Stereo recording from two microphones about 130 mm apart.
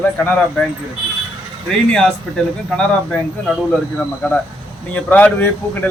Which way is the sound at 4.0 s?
10° left (ahead or behind).